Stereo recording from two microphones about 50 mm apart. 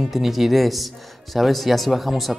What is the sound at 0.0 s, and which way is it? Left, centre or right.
Speech, centre.